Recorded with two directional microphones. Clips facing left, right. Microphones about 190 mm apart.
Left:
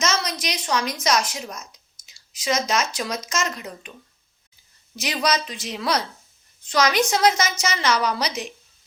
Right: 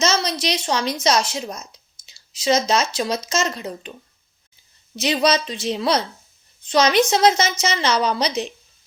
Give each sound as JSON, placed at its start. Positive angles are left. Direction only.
{"t": 0.0, "sound": "a woman's voice", "side_deg": -30}
{"t": 4.9, "sound": "a woman's voice", "side_deg": -25}